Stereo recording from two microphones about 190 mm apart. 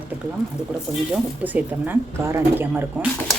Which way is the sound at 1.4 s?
10° right (ahead or behind).